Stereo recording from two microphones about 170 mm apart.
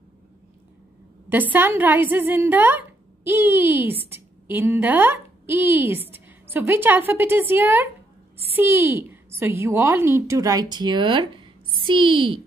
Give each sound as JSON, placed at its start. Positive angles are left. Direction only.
{"t": 1.3, "sound": "a woman's voice", "side_deg": -10}